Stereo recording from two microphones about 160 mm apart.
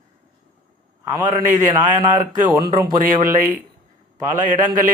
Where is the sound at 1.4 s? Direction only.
50° right (ahead or behind).